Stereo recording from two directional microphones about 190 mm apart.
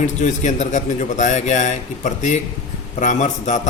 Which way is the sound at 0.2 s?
40° left (ahead or behind).